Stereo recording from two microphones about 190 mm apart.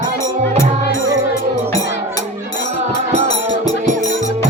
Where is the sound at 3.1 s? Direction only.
35° right (ahead or behind).